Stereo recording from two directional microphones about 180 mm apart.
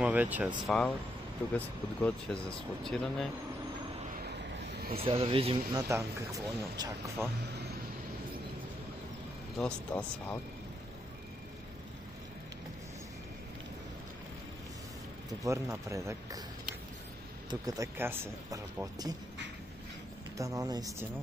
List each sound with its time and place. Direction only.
0.0 s speech: 10° right (ahead or behind)
0.7 s speech: centre (ahead or behind)
4.1 s vehicle: 60° right (ahead or behind)
4.9 s a man's voice: 30° right (ahead or behind)
5.9 s speech: 15° right (ahead or behind)
9.6 s speech: 5° left (ahead or behind)
15.4 s speech: 15° right (ahead or behind)
17.5 s speech: 20° right (ahead or behind)
20.3 s speech: 20° right (ahead or behind)